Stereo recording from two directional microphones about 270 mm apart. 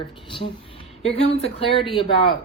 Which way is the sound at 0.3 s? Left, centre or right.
Centre.